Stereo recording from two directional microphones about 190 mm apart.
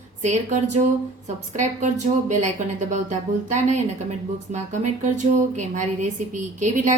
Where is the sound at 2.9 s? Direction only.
40° right (ahead or behind).